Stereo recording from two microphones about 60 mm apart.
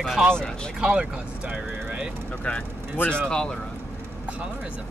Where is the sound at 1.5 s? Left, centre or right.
Centre.